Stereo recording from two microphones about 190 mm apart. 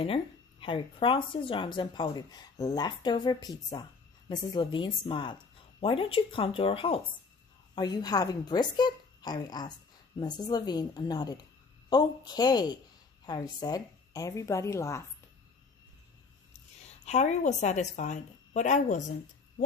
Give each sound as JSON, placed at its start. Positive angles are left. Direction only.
{"t": 0.0, "sound": "a woman's voice", "side_deg": 30}
{"t": 17.0, "sound": "a woman's voice", "side_deg": 35}